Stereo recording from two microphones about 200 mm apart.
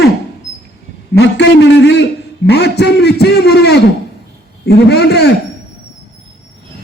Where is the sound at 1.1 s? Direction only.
60° left (ahead or behind).